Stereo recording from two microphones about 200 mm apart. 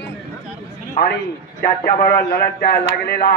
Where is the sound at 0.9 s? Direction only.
50° left (ahead or behind).